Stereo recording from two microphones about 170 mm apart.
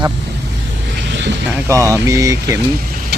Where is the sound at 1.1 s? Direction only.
90° right.